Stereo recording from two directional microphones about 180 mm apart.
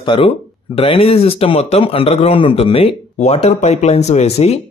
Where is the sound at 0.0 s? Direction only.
30° left (ahead or behind).